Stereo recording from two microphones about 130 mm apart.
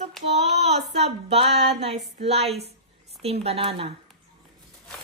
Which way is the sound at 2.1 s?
50° right (ahead or behind).